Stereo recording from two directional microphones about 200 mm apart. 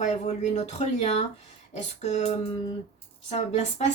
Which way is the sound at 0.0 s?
35° left (ahead or behind).